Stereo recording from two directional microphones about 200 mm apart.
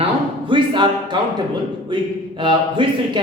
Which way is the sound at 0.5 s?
25° right (ahead or behind).